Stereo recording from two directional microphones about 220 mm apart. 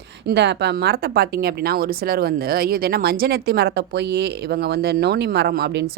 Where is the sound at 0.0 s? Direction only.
50° right (ahead or behind).